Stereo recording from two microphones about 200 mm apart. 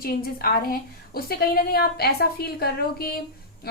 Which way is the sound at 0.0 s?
50° left (ahead or behind).